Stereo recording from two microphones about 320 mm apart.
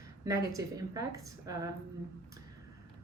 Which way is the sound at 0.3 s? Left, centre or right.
Centre.